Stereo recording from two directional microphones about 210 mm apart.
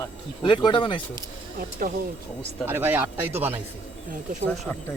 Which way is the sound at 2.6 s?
10° right (ahead or behind).